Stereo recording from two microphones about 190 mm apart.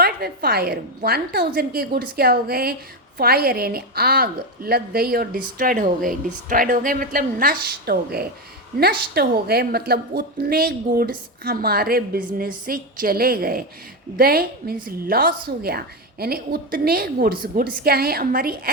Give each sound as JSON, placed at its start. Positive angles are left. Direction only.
{"t": 0.0, "sound": "a woman's voice", "side_deg": -55}